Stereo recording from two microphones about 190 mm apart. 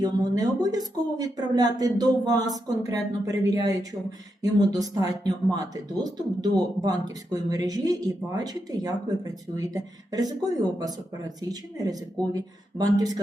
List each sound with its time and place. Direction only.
0.0 s speech: 20° right (ahead or behind)
11.3 s speech: 20° right (ahead or behind)